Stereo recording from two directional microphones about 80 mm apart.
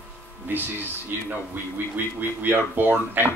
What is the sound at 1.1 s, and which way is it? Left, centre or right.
Speech, right.